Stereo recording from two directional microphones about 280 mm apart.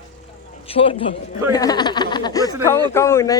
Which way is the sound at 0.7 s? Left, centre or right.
Centre.